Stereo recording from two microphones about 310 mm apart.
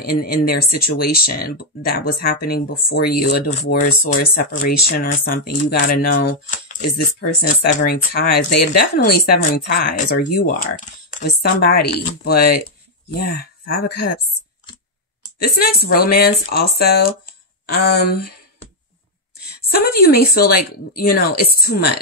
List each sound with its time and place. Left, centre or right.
0.8 s speech: left
15.3 s speech: left
19.7 s speech: left